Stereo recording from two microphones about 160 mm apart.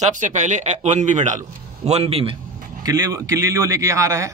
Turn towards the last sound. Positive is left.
turn(degrees=-20)  # may be behind; listen again after turning